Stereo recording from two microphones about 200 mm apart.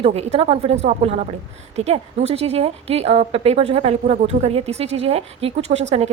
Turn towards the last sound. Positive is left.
turn(degrees=-35)  # may be behind; listen again after turning